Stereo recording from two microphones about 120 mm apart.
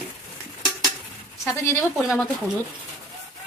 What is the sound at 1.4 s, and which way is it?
Speech, 25° left (ahead or behind).